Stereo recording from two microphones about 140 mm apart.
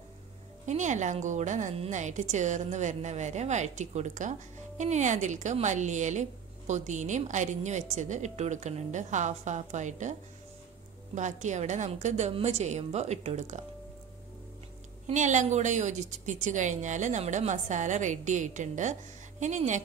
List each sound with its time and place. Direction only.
0.7 s a woman's voice: 60° right (ahead or behind)
11.1 s a woman's voice: 60° right (ahead or behind)
15.0 s a woman's voice: 60° right (ahead or behind)